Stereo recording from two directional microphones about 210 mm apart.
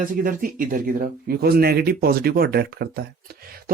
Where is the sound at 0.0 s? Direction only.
40° right (ahead or behind).